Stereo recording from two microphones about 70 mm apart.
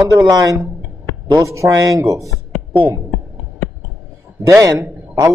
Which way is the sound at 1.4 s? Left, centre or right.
Right.